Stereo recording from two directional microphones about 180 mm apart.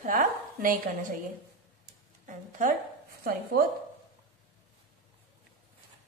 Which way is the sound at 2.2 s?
45° right (ahead or behind).